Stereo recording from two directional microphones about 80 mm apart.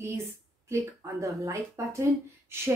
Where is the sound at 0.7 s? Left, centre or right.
Right.